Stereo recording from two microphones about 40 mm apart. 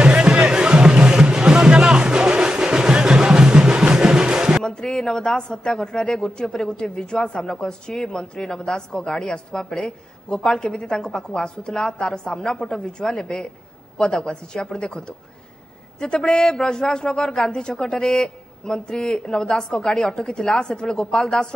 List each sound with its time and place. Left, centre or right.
0.0 s music: right
4.6 s a sound: centre
5.7 s a woman's voice: centre